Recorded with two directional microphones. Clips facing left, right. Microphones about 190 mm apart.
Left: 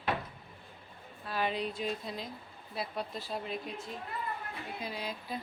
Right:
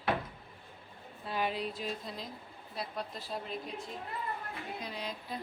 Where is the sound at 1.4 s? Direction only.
Centre (ahead or behind).